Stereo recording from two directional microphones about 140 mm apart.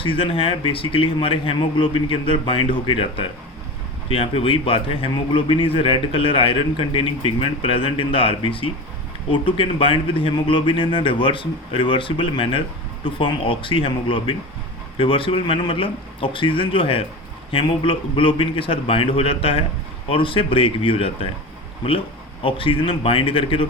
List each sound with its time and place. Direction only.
0.0 s a man's voice: 40° left (ahead or behind)
22.4 s a man's voice: 40° left (ahead or behind)